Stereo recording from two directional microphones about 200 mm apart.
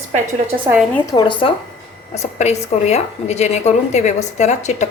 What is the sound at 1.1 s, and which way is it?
A woman's voice, 25° left (ahead or behind).